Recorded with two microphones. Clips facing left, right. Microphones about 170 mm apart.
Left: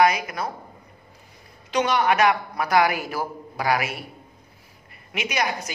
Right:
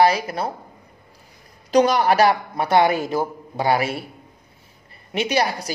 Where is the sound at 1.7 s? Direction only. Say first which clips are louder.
Right 5 dB; 35° right (ahead or behind).